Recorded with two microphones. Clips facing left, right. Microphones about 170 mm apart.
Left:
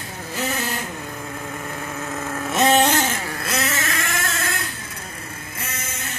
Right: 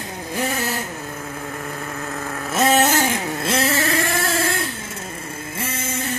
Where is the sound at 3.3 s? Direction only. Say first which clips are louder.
Right 5 dB; 25° right (ahead or behind).